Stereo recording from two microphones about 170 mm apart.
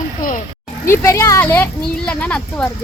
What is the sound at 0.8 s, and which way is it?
Speech, 15° left (ahead or behind).